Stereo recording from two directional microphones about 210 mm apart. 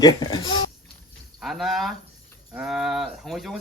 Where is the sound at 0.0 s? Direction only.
20° left (ahead or behind).